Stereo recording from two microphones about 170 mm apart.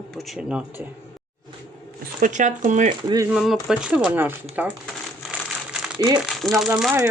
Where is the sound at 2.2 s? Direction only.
45° right (ahead or behind).